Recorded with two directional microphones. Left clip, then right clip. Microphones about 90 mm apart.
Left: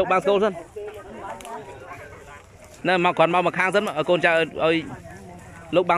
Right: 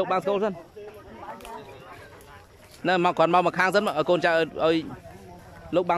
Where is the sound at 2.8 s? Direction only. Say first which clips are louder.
Left 2 dB; 20° right (ahead or behind).